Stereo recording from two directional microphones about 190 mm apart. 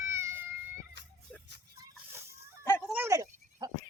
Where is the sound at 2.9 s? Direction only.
15° right (ahead or behind).